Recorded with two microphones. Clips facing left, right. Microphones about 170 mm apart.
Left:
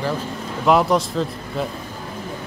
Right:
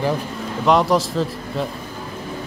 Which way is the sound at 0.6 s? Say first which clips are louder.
Even; centre (ahead or behind).